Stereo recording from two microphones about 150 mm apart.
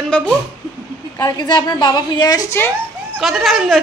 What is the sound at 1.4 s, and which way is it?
A woman's voice, 30° left (ahead or behind).